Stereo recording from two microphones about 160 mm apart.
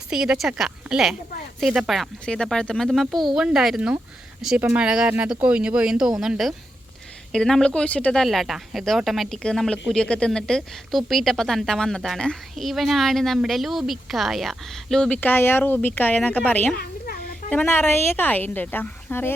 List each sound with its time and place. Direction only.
0.1 s speech: 5° right (ahead or behind)
16.7 s a sound: 70° left (ahead or behind)
17.5 s speech: 10° left (ahead or behind)